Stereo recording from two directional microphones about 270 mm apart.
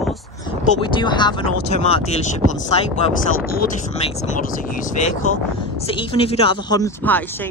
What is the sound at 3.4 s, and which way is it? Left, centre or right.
Speech, left.